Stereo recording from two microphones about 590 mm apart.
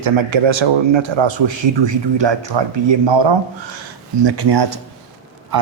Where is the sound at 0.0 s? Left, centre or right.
Right.